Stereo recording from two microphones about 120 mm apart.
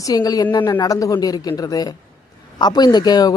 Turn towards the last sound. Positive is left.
turn(degrees=35)  # may be behind; listen again after turning